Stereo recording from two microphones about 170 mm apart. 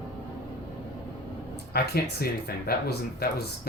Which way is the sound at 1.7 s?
65° left (ahead or behind).